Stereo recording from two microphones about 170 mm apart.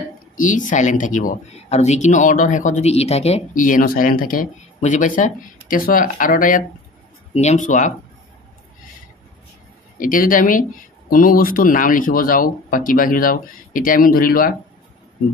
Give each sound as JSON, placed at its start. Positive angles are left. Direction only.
{"t": 0.4, "sound": "speech", "side_deg": 50}
{"t": 9.9, "sound": "speech", "side_deg": 55}